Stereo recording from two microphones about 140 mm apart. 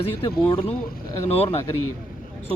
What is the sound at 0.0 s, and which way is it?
Speech, 40° left (ahead or behind).